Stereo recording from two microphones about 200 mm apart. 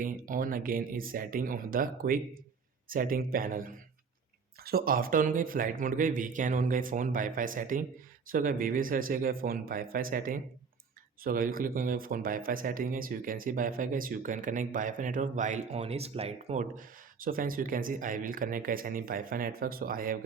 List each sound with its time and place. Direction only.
0.0 s speech: 40° right (ahead or behind)